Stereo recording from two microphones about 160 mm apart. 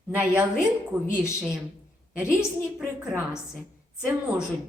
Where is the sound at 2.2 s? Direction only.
5° right (ahead or behind).